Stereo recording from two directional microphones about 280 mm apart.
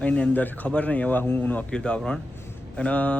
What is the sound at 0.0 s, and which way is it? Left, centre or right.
Speech, centre.